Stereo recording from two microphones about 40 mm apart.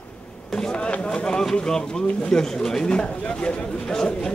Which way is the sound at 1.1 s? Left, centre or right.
Centre.